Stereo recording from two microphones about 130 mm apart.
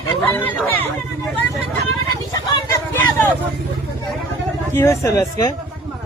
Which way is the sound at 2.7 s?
15° left (ahead or behind).